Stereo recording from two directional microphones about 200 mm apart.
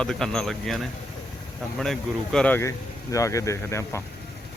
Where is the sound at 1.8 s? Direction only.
5° left (ahead or behind).